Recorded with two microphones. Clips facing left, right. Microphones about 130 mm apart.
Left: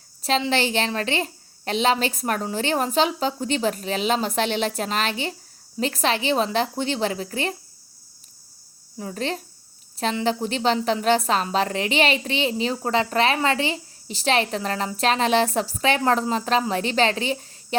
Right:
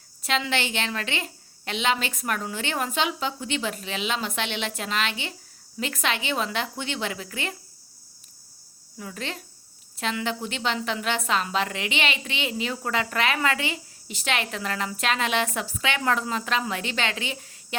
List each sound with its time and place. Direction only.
0.2 s a woman's voice: 35° left (ahead or behind)
9.0 s a woman's voice: 35° left (ahead or behind)